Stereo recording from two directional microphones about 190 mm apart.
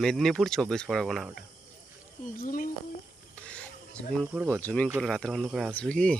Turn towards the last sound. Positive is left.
turn(degrees=5)  # may be behind; listen again after turning